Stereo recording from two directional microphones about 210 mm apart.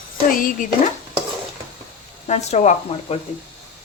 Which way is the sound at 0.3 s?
40° left (ahead or behind).